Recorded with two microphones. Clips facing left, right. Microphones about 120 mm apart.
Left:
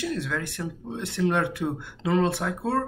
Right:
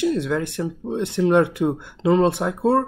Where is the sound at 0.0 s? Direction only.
20° right (ahead or behind).